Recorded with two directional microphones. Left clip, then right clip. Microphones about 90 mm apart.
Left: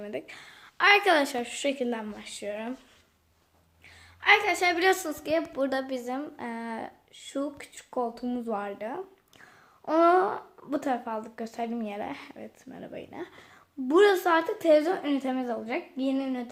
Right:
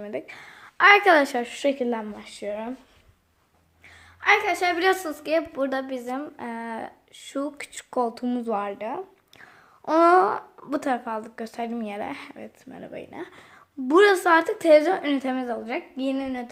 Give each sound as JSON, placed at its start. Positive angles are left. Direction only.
{"t": 0.0, "sound": "a woman's voice", "side_deg": -30}
{"t": 0.5, "sound": "a woman's voice", "side_deg": -60}
{"t": 2.1, "sound": "speech", "side_deg": -35}
{"t": 4.2, "sound": "speech", "side_deg": -10}
{"t": 7.1, "sound": "speech", "side_deg": -25}
{"t": 7.6, "sound": "speech", "side_deg": -45}
{"t": 8.4, "sound": "a sound", "side_deg": -25}
{"t": 10.2, "sound": "speech", "side_deg": -35}
{"t": 10.6, "sound": "speech", "side_deg": -20}
{"t": 15.4, "sound": "a woman's voice", "side_deg": 0}